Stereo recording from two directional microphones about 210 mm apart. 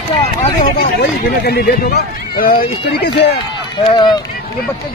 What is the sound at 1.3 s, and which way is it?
Speech, 50° left (ahead or behind).